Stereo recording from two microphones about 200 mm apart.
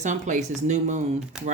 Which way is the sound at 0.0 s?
35° right (ahead or behind).